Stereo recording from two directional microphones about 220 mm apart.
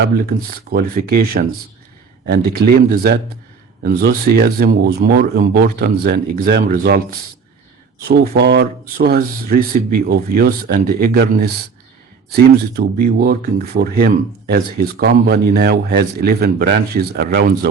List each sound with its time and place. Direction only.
0.0 s speech: 45° right (ahead or behind)
8.3 s speech: 50° right (ahead or behind)